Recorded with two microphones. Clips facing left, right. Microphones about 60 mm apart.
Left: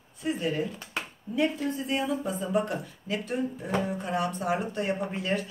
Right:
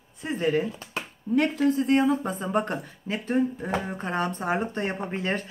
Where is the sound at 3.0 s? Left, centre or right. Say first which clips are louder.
Right 5 dB; right.